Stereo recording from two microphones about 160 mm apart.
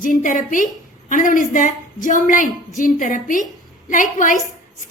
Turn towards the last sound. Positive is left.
turn(degrees=55)  # may be behind; listen again after turning